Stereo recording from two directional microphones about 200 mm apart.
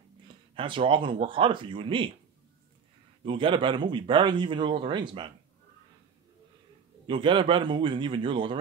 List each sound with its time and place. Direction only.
0.6 s speech: 25° right (ahead or behind)
3.3 s speech: 25° right (ahead or behind)
7.1 s speech: 25° right (ahead or behind)